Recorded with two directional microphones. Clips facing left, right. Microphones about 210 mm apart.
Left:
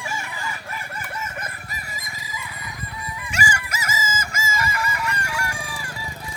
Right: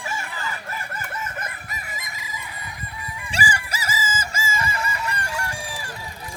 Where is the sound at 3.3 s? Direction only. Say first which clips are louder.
Even; 35° right (ahead or behind).